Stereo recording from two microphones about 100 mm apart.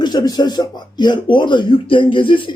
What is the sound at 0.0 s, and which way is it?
Speech, 45° left (ahead or behind).